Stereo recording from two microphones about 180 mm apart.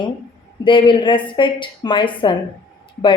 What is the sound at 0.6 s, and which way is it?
A woman's voice, 25° left (ahead or behind).